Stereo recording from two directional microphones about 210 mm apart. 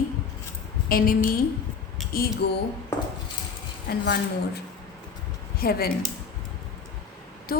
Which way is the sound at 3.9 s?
50° left (ahead or behind).